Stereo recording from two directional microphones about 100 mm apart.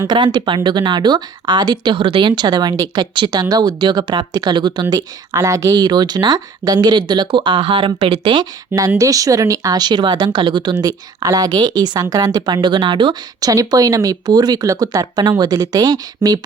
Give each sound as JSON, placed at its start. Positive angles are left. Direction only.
{"t": 0.1, "sound": "speech", "side_deg": -45}
{"t": 12.6, "sound": "speech", "side_deg": -50}
{"t": 13.5, "sound": "speech", "side_deg": -35}